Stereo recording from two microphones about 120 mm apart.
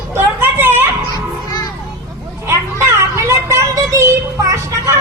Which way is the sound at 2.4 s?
20° right (ahead or behind).